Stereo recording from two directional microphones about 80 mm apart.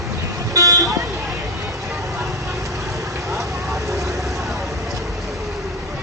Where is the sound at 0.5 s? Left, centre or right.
Right.